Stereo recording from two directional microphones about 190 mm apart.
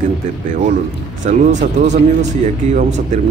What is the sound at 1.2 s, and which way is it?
Speech, 40° right (ahead or behind).